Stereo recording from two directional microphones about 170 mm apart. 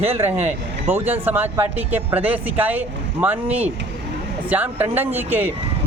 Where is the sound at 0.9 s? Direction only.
10° right (ahead or behind).